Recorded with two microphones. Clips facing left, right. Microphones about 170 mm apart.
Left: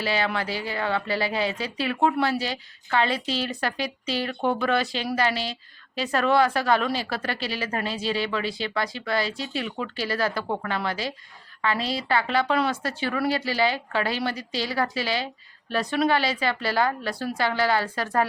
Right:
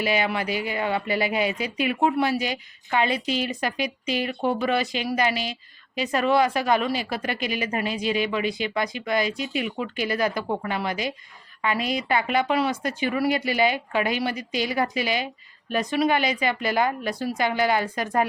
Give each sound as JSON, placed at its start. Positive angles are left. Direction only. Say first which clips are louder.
{"t": 0.0, "sound": "speech", "louder": "right 2 dB", "side_deg": -15}
{"t": 2.0, "sound": "speech", "louder": "even", "side_deg": -5}
{"t": 4.3, "sound": "speech", "louder": "left 1 dB", "side_deg": 0}
{"t": 9.6, "sound": "speech", "louder": "right 2 dB", "side_deg": -5}
{"t": 9.9, "sound": "speech", "louder": "right 2 dB", "side_deg": -15}